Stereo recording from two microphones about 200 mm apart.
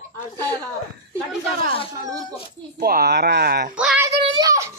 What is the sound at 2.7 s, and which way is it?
Speech, 50° right (ahead or behind).